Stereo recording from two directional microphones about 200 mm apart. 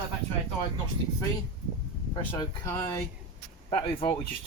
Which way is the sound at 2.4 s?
10° left (ahead or behind).